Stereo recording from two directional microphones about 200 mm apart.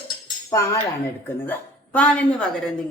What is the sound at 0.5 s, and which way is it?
Speech, 15° left (ahead or behind).